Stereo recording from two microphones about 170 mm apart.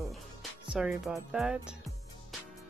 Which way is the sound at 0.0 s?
Centre (ahead or behind).